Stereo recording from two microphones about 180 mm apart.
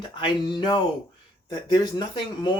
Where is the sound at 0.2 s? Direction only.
25° left (ahead or behind).